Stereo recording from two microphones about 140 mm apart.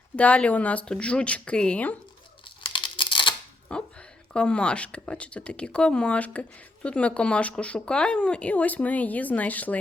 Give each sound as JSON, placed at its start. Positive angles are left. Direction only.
{"t": 0.2, "sound": "speech", "side_deg": 10}
{"t": 2.7, "sound": "a sound", "side_deg": 35}
{"t": 3.7, "sound": "speech", "side_deg": 5}